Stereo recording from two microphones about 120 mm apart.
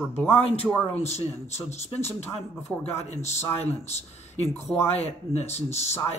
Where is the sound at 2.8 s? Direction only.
70° left (ahead or behind).